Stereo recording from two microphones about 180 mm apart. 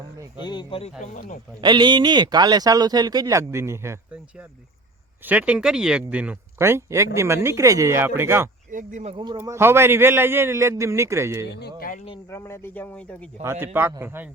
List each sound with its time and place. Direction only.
0.3 s speech: 25° left (ahead or behind); by 1.4 s 40° left (ahead or behind)
1.6 s speech: 25° right (ahead or behind)
8.7 s speech: 45° right (ahead or behind)
9.1 s speech: 25° right (ahead or behind)
9.4 s speech: 15° right (ahead or behind)
11.4 s speech: 70° left (ahead or behind)
12.3 s speech: 15° left (ahead or behind)
13.4 s speech: 15° right (ahead or behind)